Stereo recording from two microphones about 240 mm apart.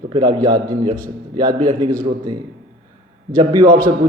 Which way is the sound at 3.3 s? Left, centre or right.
Centre.